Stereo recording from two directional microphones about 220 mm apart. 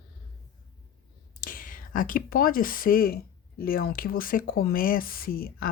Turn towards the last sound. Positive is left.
turn(degrees=40)  # may be behind; listen again after turning